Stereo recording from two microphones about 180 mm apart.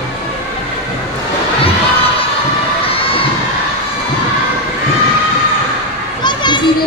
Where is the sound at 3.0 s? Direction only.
30° left (ahead or behind).